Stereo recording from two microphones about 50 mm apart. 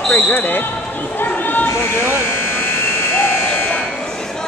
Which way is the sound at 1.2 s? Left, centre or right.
Left.